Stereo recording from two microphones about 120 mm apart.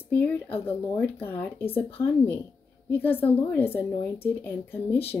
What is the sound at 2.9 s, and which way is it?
Speech, 15° left (ahead or behind).